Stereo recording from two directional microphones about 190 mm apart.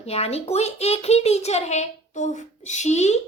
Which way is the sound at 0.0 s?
35° left (ahead or behind).